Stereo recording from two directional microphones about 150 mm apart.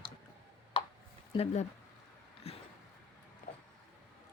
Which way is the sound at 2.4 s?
40° left (ahead or behind).